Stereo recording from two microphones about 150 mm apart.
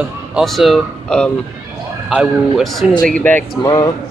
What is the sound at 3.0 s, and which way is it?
Speech, 10° left (ahead or behind).